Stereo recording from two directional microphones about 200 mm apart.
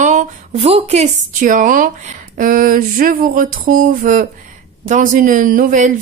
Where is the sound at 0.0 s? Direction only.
35° right (ahead or behind).